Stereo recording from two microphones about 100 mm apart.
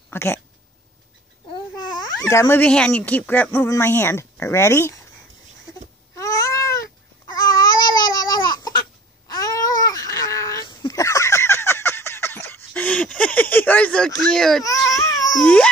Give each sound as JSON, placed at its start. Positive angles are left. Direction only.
{"t": 0.1, "sound": "speech", "side_deg": 25}
{"t": 2.2, "sound": "speech", "side_deg": 30}
{"t": 2.6, "sound": "speech", "side_deg": 10}
{"t": 6.1, "sound": "cat", "side_deg": 35}
{"t": 7.3, "sound": "babbling", "side_deg": 40}
{"t": 9.3, "sound": "a sound", "side_deg": 40}
{"t": 10.6, "sound": "a sound", "side_deg": 50}
{"t": 10.9, "sound": "a sound", "side_deg": 30}
{"t": 14.6, "sound": "baby cry", "side_deg": 35}
{"t": 15.4, "sound": "babbling", "side_deg": 10}